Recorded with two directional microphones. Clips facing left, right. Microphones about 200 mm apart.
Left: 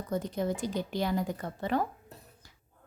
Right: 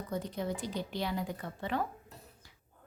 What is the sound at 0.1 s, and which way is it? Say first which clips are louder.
Speech: left 5 dB; 45° left (ahead or behind).